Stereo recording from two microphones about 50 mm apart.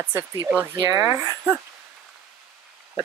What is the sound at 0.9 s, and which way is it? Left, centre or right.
Speech, right.